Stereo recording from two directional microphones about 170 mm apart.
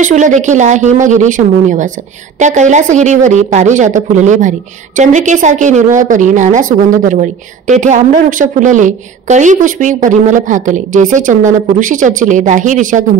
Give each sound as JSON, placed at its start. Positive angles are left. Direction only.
{"t": 0.0, "sound": "speech", "side_deg": -45}